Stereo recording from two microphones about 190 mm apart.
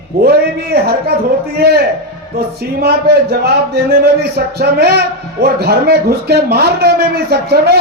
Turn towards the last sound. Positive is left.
turn(degrees=-60)  # may be behind; listen again after turning